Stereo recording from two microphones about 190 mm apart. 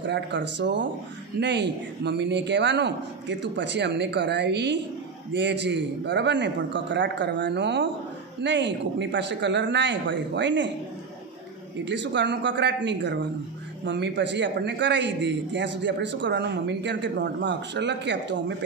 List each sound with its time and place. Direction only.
0.0 s a man's voice: 65° right (ahead or behind)
11.8 s a man's voice: 70° right (ahead or behind)